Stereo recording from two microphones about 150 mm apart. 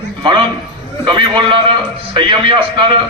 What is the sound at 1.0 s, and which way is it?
A man's voice, 30° right (ahead or behind).